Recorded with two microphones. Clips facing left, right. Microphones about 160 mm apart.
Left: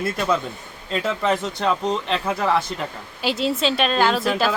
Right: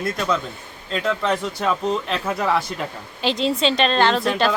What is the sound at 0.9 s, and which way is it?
A woman's voice, 5° left (ahead or behind).